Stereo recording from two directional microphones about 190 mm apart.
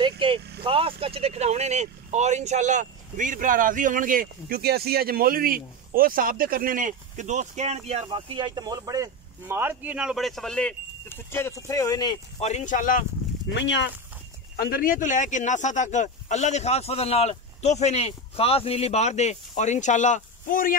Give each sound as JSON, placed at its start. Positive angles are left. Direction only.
{"t": 0.7, "sound": "speech", "side_deg": -30}
{"t": 12.4, "sound": "speech", "side_deg": 35}
{"t": 13.5, "sound": "speech", "side_deg": 70}
{"t": 14.6, "sound": "speech", "side_deg": 50}